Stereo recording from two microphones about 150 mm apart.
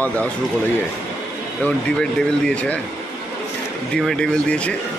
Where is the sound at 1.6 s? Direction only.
5° left (ahead or behind).